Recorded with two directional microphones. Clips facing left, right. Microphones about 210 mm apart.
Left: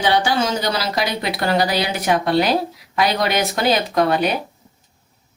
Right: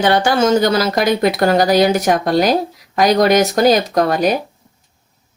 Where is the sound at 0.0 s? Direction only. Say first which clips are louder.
Right 5 dB; 50° right (ahead or behind).